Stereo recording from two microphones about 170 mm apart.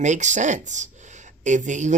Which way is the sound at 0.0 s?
45° right (ahead or behind).